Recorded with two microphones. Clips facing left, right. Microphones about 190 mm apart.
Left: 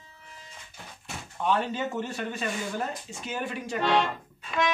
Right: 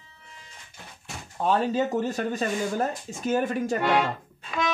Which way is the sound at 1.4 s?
40° right (ahead or behind).